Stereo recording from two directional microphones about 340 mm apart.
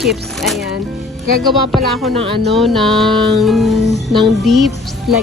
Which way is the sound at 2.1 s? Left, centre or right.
Centre.